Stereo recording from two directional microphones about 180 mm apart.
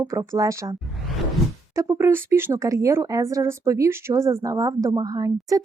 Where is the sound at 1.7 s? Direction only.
15° right (ahead or behind).